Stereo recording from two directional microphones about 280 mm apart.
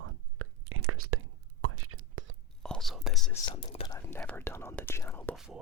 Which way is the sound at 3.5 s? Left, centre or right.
Centre.